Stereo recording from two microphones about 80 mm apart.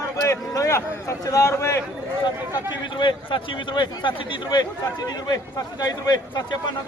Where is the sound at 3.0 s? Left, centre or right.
Left.